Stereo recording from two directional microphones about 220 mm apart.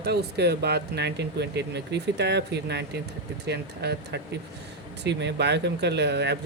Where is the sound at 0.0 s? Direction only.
45° right (ahead or behind).